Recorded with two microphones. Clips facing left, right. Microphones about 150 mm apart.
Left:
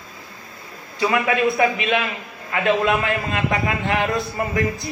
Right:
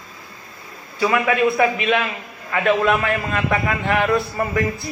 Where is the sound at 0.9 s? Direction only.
30° left (ahead or behind).